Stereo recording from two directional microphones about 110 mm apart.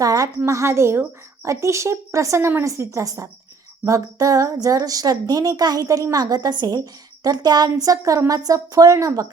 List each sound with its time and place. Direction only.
0.0 s speech: 35° right (ahead or behind)